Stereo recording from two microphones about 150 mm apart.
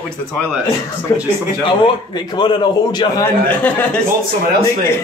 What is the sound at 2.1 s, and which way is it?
A man's voice, 30° left (ahead or behind).